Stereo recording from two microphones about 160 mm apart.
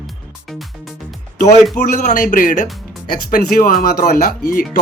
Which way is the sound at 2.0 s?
60° left (ahead or behind).